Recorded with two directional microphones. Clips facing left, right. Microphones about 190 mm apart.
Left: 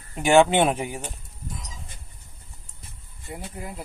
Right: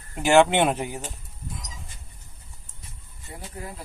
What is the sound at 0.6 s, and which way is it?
Speech, 10° left (ahead or behind).